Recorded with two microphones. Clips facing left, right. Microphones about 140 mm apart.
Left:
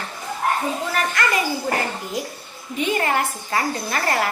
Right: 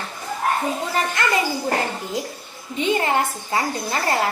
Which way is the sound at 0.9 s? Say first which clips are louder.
Even; 25° right (ahead or behind).